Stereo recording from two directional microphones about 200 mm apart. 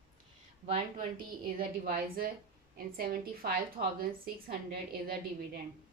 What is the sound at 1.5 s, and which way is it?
A woman's voice, 45° right (ahead or behind).